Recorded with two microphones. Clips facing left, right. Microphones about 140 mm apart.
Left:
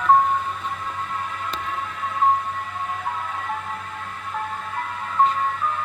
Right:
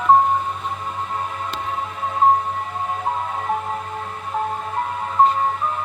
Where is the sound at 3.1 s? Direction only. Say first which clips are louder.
Right 5 dB; 30° right (ahead or behind).